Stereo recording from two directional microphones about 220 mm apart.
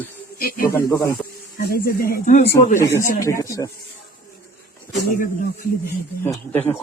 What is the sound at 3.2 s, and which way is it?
Speech, 15° left (ahead or behind).